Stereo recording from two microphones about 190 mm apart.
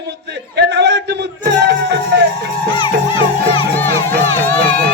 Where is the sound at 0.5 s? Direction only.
60° right (ahead or behind).